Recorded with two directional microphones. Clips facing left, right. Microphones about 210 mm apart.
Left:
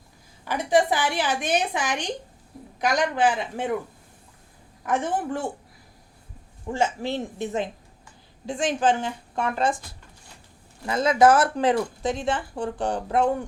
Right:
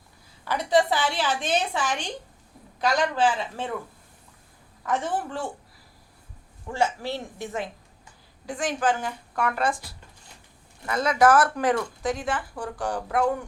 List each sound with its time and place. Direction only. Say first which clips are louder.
0.4 s a woman's voice: left 1 dB; 15° left (ahead or behind)
4.9 s a woman's voice: left 2 dB; 15° left (ahead or behind)
6.7 s speech: left 1 dB; 20° left (ahead or behind)
10.8 s speech: left 2 dB; 25° left (ahead or behind)